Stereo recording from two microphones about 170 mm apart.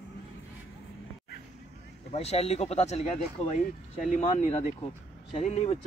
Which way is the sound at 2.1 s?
40° left (ahead or behind).